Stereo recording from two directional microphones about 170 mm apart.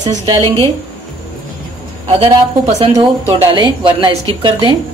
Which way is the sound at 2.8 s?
35° right (ahead or behind).